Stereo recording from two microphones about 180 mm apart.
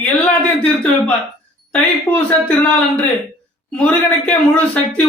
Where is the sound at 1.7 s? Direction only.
5° left (ahead or behind).